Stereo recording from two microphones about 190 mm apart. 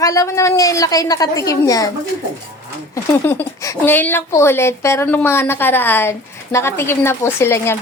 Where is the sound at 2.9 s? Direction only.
15° left (ahead or behind).